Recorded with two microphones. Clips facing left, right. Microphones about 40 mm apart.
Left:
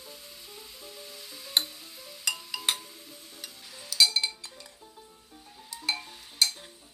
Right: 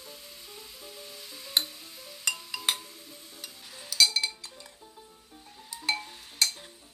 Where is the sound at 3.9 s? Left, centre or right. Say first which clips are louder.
Even; centre.